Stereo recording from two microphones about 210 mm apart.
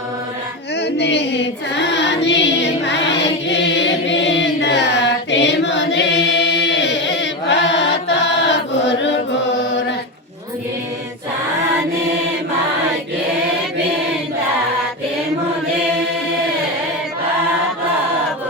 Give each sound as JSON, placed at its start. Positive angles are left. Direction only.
{"t": 0.8, "sound": "music", "side_deg": 55}
{"t": 3.5, "sound": "chant", "side_deg": 60}